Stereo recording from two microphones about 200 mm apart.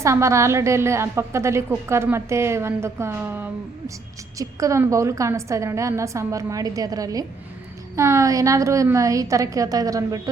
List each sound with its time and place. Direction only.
0.0 s a woman's voice: 15° right (ahead or behind)